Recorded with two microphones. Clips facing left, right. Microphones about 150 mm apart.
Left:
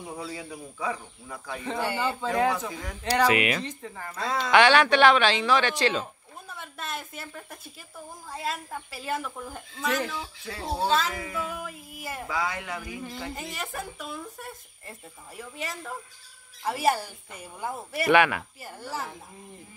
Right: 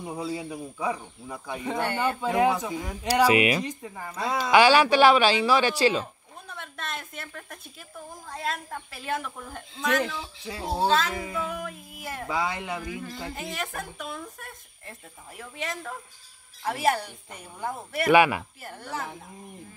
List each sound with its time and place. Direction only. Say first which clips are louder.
0.0 s speech: right 4 dB; 20° right (ahead or behind)
1.8 s speech: right 1 dB; 5° left (ahead or behind)
2.2 s speech: right 2 dB; 15° right (ahead or behind)
6.5 s a woman's voice: even; 5° left (ahead or behind)
10.4 s speech: right 3 dB; 15° right (ahead or behind)
10.9 s speech: even; centre (ahead or behind)
12.3 s a man's voice: right 2 dB; 20° right (ahead or behind)
13.3 s speech: right 2 dB; centre (ahead or behind)
18.1 s speech: right 2 dB; 10° right (ahead or behind)
18.6 s speech: even; centre (ahead or behind)